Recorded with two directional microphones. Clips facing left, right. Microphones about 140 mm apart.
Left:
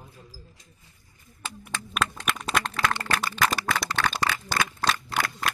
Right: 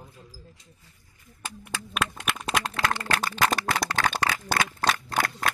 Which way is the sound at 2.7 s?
40° right (ahead or behind).